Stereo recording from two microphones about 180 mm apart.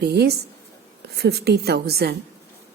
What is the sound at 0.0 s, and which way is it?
A woman's voice, 65° right (ahead or behind).